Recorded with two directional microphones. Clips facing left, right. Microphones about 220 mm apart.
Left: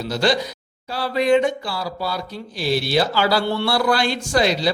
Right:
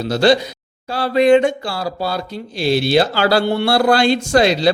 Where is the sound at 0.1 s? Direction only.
25° right (ahead or behind).